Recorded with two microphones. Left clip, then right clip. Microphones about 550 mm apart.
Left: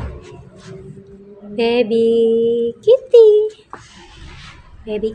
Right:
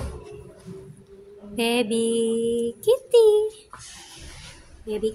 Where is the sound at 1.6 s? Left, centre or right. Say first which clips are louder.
Left 8 dB; right.